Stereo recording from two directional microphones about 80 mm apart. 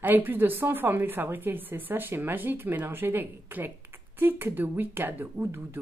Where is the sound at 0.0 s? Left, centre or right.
Right.